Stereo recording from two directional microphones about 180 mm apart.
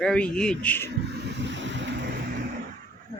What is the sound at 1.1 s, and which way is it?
Vehicle, 75° right (ahead or behind).